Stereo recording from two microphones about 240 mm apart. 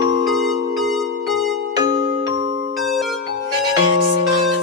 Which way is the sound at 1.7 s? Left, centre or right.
Centre.